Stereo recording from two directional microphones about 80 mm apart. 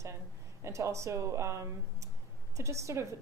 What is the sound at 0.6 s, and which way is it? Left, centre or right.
A woman's voice, right.